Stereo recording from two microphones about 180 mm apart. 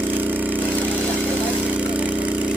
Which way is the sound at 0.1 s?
10° right (ahead or behind).